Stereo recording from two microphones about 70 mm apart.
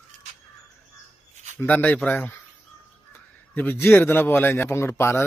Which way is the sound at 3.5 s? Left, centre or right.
Left.